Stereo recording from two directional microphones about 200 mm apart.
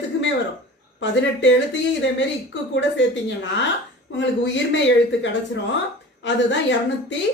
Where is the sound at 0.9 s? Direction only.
65° left (ahead or behind).